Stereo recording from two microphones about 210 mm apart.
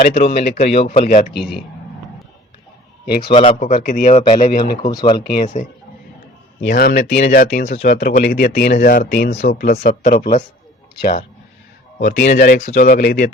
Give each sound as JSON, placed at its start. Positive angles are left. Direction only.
{"t": 0.0, "sound": "speech", "side_deg": 45}
{"t": 0.8, "sound": "a man's voice", "side_deg": 30}
{"t": 1.3, "sound": "speech", "side_deg": 50}
{"t": 3.3, "sound": "a man's voice", "side_deg": 35}
{"t": 4.8, "sound": "speech", "side_deg": 20}
{"t": 5.2, "sound": "speech", "side_deg": 45}
{"t": 11.9, "sound": "speech", "side_deg": 50}